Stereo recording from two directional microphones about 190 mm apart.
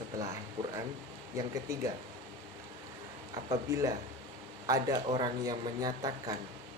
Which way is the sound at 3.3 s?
20° right (ahead or behind).